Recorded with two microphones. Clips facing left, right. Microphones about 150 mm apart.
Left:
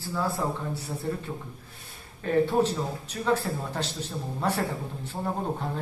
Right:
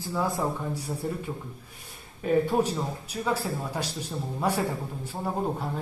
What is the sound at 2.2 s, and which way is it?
A man's voice, 10° right (ahead or behind).